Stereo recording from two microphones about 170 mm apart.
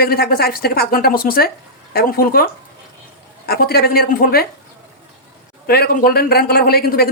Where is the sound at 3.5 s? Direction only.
65° left (ahead or behind).